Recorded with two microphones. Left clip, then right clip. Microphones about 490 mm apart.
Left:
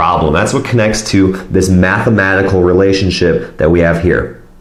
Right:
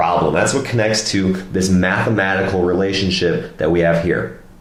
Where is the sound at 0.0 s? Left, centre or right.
Left.